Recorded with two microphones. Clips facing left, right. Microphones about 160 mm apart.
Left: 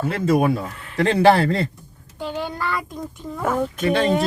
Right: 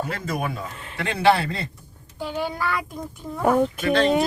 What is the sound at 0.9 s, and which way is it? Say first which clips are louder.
Speech: left 5 dB; 40° left (ahead or behind).